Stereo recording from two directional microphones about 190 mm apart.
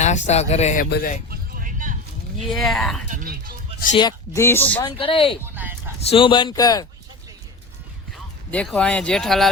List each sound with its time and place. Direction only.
0.0 s speech: 35° left (ahead or behind)
0.9 s speech: 60° left (ahead or behind)
1.3 s vehicle: 45° right (ahead or behind)
2.5 s speech: centre (ahead or behind)
3.1 s speech: 45° right (ahead or behind)
4.4 s speech: 10° left (ahead or behind)
4.8 s speech: 25° left (ahead or behind)
5.4 s a sound: 10° right (ahead or behind)
6.1 s speech: 25° left (ahead or behind)
8.1 s speech: 5° left (ahead or behind)